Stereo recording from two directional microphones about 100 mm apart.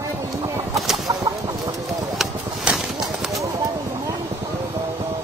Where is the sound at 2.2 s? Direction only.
5° right (ahead or behind).